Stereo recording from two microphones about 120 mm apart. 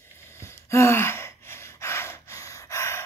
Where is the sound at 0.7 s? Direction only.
25° left (ahead or behind).